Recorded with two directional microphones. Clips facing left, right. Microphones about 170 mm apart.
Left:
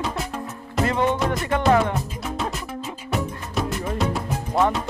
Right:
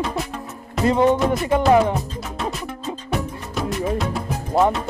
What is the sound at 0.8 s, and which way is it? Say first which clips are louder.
Speech: right 5 dB; 15° right (ahead or behind).